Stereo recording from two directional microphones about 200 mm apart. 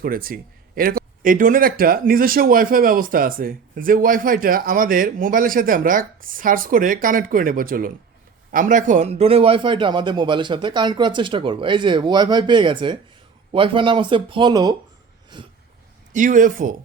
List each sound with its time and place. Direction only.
0.0 s a man's voice: 45° right (ahead or behind); by 15.5 s 20° right (ahead or behind)
16.1 s speech: 40° right (ahead or behind)